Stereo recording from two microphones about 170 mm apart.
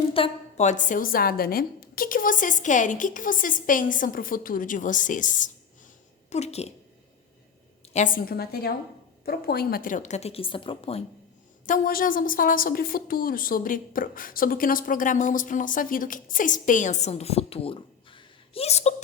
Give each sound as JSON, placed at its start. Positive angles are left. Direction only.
{"t": 0.1, "sound": "a woman's voice", "side_deg": 35}
{"t": 7.9, "sound": "a woman's voice", "side_deg": 50}
{"t": 11.6, "sound": "a woman's voice", "side_deg": 55}